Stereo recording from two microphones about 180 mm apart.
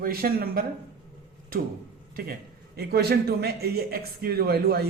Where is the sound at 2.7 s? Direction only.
60° right (ahead or behind).